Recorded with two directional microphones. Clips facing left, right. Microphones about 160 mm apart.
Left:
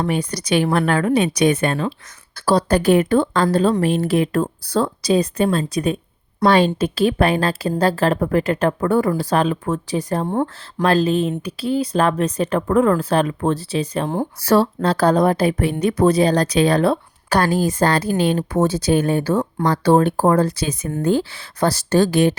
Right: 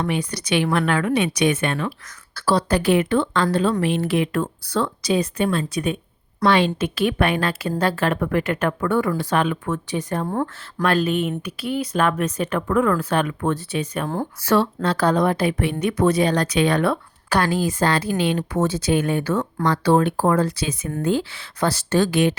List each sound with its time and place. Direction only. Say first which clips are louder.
0.0 s speech: left 3 dB; 40° left (ahead or behind)
10.2 s speech: left 3 dB; 25° left (ahead or behind)